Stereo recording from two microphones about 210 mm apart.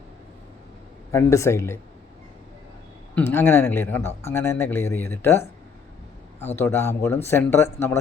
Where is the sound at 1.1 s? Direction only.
15° left (ahead or behind).